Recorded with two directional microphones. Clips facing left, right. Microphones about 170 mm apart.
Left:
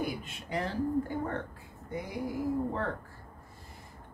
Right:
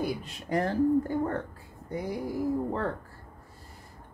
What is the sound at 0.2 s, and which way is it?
Speech, 45° right (ahead or behind).